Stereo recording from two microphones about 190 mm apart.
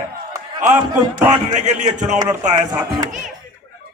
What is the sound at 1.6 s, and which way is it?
Speech, 40° right (ahead or behind).